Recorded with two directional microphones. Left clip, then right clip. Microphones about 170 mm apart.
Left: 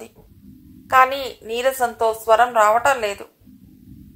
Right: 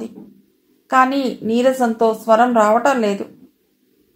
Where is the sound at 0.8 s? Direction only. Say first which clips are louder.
Right 1 dB; 25° left (ahead or behind).